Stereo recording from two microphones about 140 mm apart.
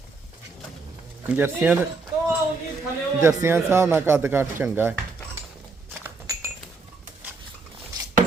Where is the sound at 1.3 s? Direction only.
15° right (ahead or behind).